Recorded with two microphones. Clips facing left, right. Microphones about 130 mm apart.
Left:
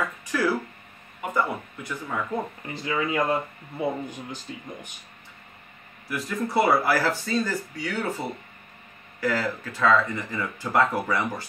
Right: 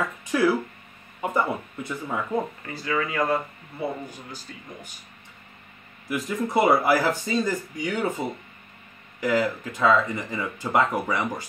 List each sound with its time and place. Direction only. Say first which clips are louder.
0.3 s speech: right 3 dB; 20° right (ahead or behind)
2.6 s speech: even; 20° left (ahead or behind)
6.0 s speech: right 2 dB; 20° right (ahead or behind)
9.2 s speech: right 3 dB; 15° right (ahead or behind)